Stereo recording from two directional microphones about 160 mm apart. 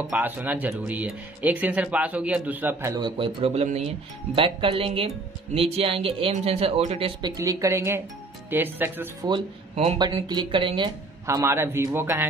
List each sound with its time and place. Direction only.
0.1 s speech: 10° right (ahead or behind)
3.2 s speech: 35° right (ahead or behind); by 9.3 s 15° right (ahead or behind)
9.9 s speech: 25° right (ahead or behind)
11.2 s speech: 15° right (ahead or behind)